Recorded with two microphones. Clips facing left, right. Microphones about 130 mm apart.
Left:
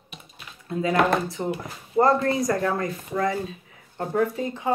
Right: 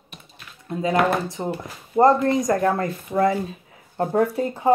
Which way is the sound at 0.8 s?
30° right (ahead or behind).